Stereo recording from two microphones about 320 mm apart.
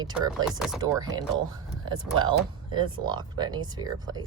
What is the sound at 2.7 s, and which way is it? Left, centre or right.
Speech, centre.